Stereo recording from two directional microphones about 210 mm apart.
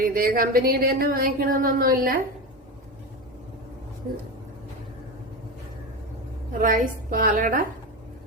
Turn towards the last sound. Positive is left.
turn(degrees=-40)  # may be behind; listen again after turning